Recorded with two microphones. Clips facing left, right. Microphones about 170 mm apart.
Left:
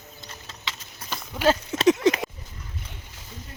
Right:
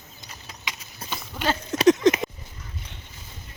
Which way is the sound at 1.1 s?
5° left (ahead or behind).